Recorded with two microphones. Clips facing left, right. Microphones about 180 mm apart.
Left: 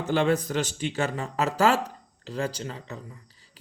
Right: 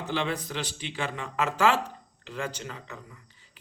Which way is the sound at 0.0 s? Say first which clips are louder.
Left 7 dB; 45° left (ahead or behind).